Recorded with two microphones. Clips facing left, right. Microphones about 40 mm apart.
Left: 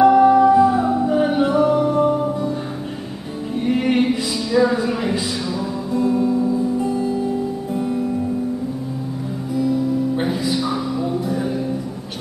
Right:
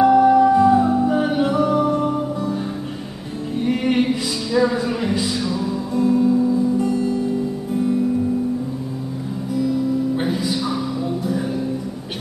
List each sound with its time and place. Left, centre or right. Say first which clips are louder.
0.0 s music: left 1 dB; centre
3.5 s music: left 1 dB; centre
6.8 s music: right 1 dB; centre
9.6 s music: left 1 dB; centre